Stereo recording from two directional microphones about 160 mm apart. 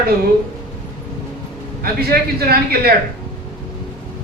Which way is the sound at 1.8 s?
70° right (ahead or behind).